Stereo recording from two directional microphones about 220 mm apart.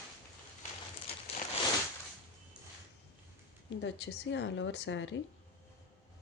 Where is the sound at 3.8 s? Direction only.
55° left (ahead or behind).